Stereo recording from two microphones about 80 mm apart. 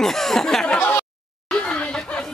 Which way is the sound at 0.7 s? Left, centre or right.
Left.